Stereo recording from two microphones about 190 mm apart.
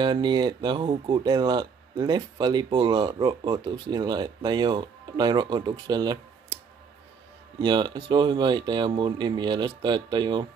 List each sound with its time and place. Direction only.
0.0 s speech: 25° right (ahead or behind)
7.6 s speech: 25° right (ahead or behind)